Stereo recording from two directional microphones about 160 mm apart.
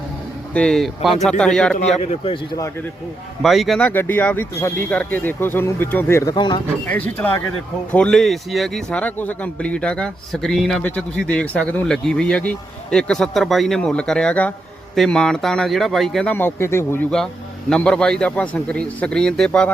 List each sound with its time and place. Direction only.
0.5 s a man's voice: 5° left (ahead or behind)
2.0 s speech: 40° left (ahead or behind)
3.4 s speech: centre (ahead or behind); by 6.3 s 15° left (ahead or behind)
6.3 s speech: 30° left (ahead or behind)
6.8 s a man's voice: 10° left (ahead or behind)
17.7 s a man's voice: 5° left (ahead or behind)